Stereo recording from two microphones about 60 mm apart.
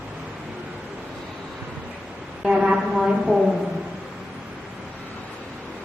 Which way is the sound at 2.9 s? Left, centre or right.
Centre.